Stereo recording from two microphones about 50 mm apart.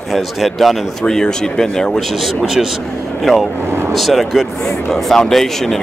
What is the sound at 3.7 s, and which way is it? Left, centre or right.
Vehicle, right.